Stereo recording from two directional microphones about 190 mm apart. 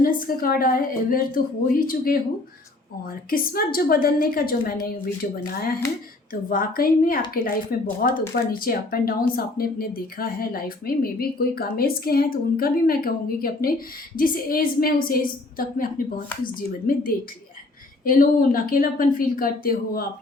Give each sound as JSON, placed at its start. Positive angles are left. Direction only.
{"t": 0.0, "sound": "speech", "side_deg": 50}
{"t": 3.2, "sound": "speech", "side_deg": 50}
{"t": 6.5, "sound": "speech", "side_deg": 50}